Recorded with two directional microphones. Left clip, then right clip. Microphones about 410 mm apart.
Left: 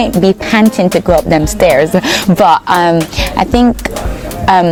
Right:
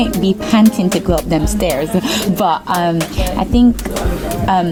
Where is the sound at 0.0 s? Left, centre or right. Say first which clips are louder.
Left 6 dB; left.